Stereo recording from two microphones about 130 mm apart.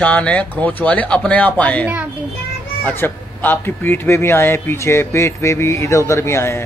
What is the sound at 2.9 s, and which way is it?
Speech, 15° left (ahead or behind).